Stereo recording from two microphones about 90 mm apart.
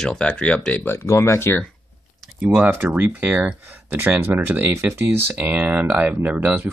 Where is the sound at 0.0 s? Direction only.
10° left (ahead or behind).